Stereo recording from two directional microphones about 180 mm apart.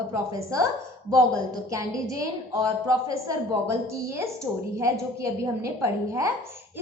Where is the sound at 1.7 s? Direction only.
20° right (ahead or behind).